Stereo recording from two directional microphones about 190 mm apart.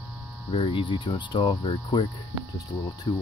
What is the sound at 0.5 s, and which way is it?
Speech, 25° left (ahead or behind).